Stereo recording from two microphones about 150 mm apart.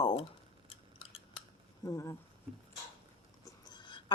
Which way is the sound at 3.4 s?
30° left (ahead or behind).